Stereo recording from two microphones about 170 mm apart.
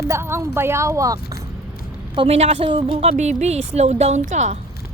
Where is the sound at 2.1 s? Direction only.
35° right (ahead or behind).